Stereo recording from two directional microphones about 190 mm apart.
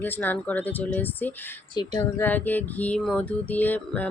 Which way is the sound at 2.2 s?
10° left (ahead or behind).